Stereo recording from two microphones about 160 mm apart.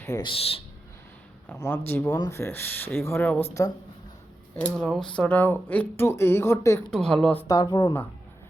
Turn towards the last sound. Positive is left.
turn(degrees=25)  # may be behind; listen again after turning